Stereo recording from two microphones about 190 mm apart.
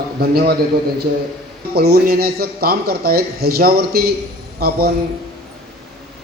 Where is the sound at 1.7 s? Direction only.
55° right (ahead or behind).